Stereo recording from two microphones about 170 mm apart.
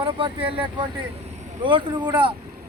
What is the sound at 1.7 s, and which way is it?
Speech, 25° right (ahead or behind).